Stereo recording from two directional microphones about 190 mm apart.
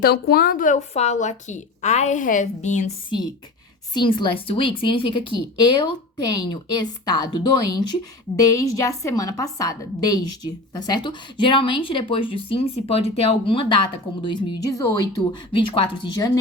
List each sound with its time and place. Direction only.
0.0 s a woman's voice: 55° left (ahead or behind); by 2.9 s 35° left (ahead or behind)
3.9 s a woman's voice: 25° left (ahead or behind)